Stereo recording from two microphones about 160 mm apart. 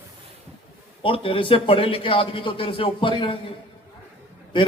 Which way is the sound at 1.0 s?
35° left (ahead or behind).